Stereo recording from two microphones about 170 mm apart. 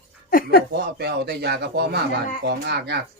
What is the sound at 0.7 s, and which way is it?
Speech, 75° right (ahead or behind).